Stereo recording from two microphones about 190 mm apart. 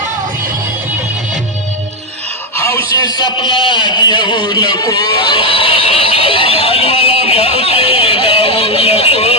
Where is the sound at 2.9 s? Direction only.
20° left (ahead or behind).